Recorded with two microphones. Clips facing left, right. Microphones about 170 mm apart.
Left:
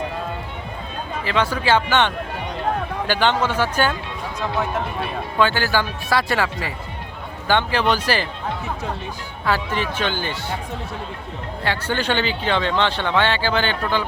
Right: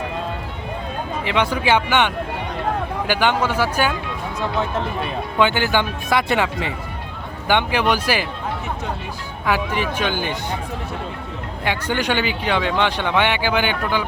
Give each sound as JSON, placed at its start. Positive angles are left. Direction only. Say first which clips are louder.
{"t": 1.2, "sound": "speech", "louder": "right 1 dB", "side_deg": -15}
{"t": 5.4, "sound": "speech", "louder": "right 1 dB", "side_deg": -20}
{"t": 9.5, "sound": "speech", "louder": "right 1 dB", "side_deg": -15}
{"t": 11.6, "sound": "speech", "louder": "right 1 dB", "side_deg": -15}